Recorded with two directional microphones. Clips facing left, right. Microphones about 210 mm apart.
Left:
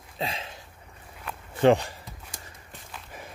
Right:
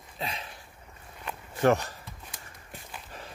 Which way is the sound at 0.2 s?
30° left (ahead or behind).